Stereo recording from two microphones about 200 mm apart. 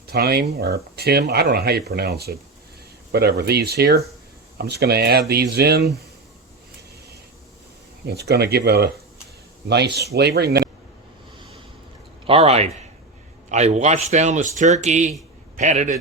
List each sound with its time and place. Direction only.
0.1 s speech: 50° right (ahead or behind)
8.0 s speech: 55° right (ahead or behind)
12.2 s speech: 30° right (ahead or behind)